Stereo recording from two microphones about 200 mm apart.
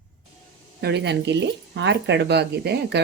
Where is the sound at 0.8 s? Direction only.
55° right (ahead or behind).